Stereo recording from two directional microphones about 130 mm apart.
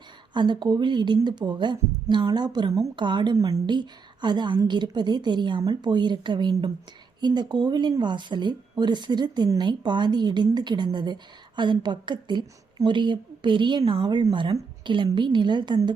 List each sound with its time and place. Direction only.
0.3 s speech: 35° right (ahead or behind)